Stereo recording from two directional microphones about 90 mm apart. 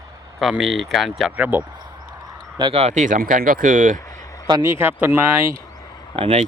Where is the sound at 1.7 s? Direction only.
50° right (ahead or behind).